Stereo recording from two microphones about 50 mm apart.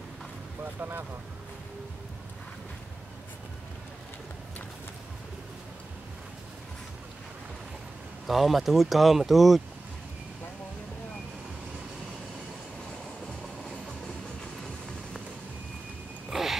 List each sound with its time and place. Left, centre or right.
0.7 s speech: right
8.3 s speech: centre
16.3 s a sound: centre